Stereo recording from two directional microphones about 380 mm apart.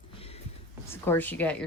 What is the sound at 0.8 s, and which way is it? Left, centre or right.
Speech, centre.